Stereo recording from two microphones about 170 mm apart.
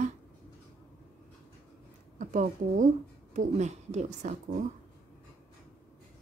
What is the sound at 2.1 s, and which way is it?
Speech, 55° right (ahead or behind).